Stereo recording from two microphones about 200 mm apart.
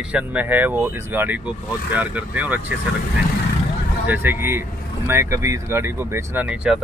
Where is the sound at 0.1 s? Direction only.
5° right (ahead or behind).